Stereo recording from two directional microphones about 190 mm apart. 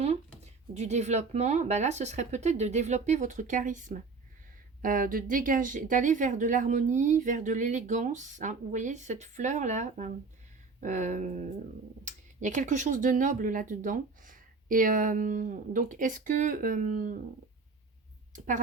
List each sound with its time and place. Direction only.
0.7 s a woman's voice: 35° right (ahead or behind)
18.3 s a woman's voice: 40° right (ahead or behind)